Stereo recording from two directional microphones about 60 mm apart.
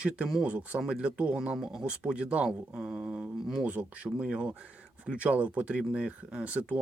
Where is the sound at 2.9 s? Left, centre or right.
Right.